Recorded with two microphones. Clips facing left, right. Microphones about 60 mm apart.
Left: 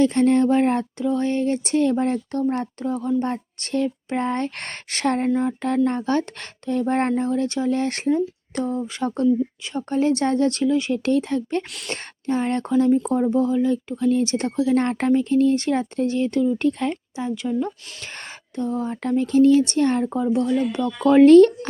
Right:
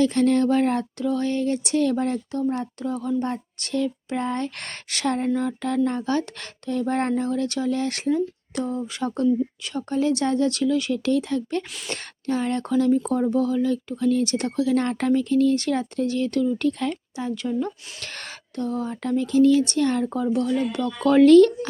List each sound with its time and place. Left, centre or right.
0.0 s speech: left
2.3 s speech: left
2.8 s speech: left
5.3 s speech: left
13.1 s speech: centre
17.2 s speech: centre; by 20.1 s left
20.1 s speech: centre; by 21.7 s left